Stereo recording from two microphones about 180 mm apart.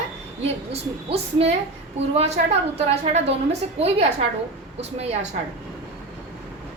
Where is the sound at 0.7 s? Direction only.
35° right (ahead or behind).